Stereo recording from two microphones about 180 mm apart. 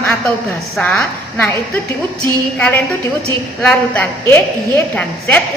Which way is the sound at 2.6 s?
10° left (ahead or behind).